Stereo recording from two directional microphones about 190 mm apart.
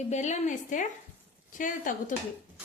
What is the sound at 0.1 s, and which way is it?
A woman's voice, 40° left (ahead or behind).